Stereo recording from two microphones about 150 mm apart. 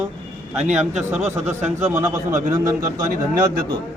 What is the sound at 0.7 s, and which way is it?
A man's voice, 10° right (ahead or behind).